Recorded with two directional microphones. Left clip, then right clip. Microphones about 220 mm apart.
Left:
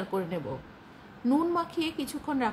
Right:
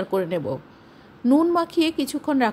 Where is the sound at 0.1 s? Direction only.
35° right (ahead or behind).